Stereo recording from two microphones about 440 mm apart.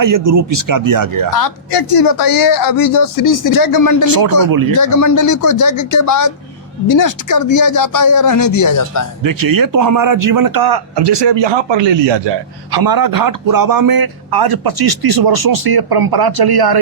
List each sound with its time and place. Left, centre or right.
0.0 s speech: right
1.3 s speech: left
4.4 s speech: right
4.7 s speech: left
9.2 s a man's voice: right
12.7 s a man's voice: right